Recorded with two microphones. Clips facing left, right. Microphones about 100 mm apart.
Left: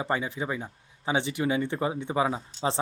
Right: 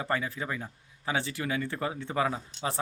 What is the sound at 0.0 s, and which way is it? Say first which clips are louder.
Speech: left 2 dB; 20° left (ahead or behind).